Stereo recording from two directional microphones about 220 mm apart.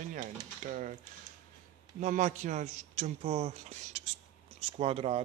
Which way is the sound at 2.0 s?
35° right (ahead or behind).